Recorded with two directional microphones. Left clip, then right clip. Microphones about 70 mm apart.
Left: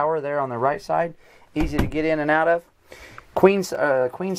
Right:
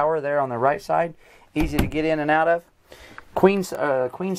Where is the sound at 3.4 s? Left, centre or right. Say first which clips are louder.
Left 2 dB; centre.